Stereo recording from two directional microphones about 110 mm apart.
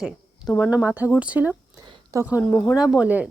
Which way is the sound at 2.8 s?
10° right (ahead or behind).